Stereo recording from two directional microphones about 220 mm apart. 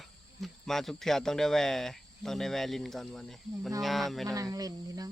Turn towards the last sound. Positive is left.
turn(degrees=-15)  # may be behind; listen again after turning